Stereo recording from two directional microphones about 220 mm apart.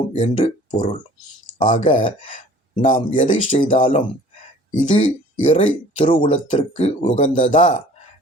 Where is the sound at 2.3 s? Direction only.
35° left (ahead or behind).